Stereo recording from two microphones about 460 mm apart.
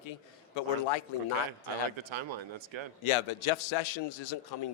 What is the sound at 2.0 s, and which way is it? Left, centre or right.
Speech, right.